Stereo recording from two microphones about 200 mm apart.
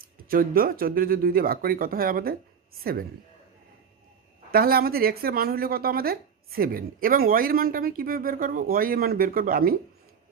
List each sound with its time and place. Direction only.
0.3 s speech: 45° right (ahead or behind)
4.5 s speech: 50° right (ahead or behind)